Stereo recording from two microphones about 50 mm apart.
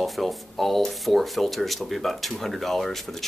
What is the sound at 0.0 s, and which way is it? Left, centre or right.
Speech, centre.